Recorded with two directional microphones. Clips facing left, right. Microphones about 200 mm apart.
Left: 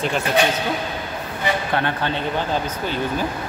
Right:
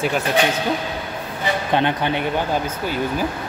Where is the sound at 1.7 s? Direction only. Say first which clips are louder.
Right 3 dB; 20° right (ahead or behind).